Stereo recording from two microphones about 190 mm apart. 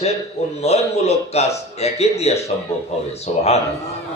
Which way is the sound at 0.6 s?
35° left (ahead or behind).